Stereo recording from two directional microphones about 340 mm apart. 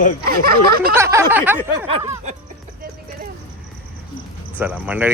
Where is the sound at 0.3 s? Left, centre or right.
Right.